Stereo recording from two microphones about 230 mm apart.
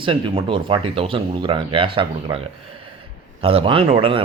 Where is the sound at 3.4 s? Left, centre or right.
Right.